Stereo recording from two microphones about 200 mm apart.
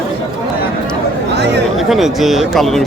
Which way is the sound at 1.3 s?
55° right (ahead or behind).